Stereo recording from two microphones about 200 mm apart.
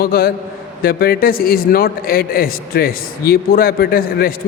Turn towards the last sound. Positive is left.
turn(degrees=50)  # may be behind; listen again after turning